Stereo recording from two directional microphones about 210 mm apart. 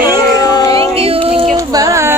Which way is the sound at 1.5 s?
15° right (ahead or behind).